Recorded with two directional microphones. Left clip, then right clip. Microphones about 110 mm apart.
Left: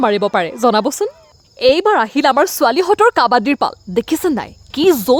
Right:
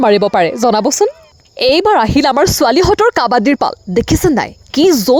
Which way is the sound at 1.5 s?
70° right (ahead or behind).